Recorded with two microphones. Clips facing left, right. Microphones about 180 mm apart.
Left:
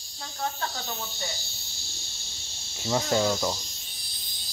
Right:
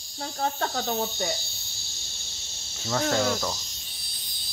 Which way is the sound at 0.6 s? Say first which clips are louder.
Right 7 dB; 55° right (ahead or behind).